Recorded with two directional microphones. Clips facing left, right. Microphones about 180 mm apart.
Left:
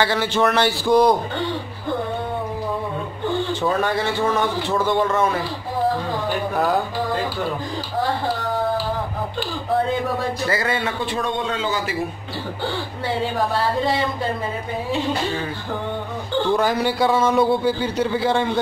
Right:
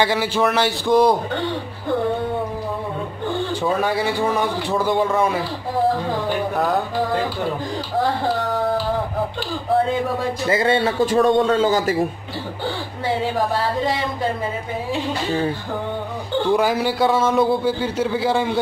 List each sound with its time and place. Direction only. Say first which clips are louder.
0.0 s a man's voice: even; 10° right (ahead or behind)
3.6 s a man's voice: right 2 dB; 10° right (ahead or behind)
6.5 s a man's voice: left 2 dB; centre (ahead or behind)
10.5 s a man's voice: right 9 dB; 25° right (ahead or behind); by 12.0 s 45° right (ahead or behind)
16.4 s a man's voice: right 2 dB; 10° right (ahead or behind)